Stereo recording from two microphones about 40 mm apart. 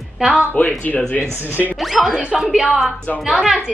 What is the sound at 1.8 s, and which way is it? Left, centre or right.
Speech, centre.